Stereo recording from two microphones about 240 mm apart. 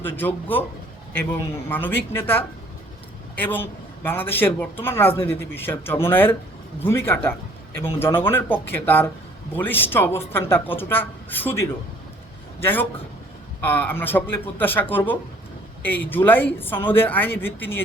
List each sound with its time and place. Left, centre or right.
0.2 s a man's voice: centre
1.7 s a man's voice: centre